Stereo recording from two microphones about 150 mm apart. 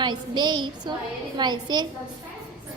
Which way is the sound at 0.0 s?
30° right (ahead or behind).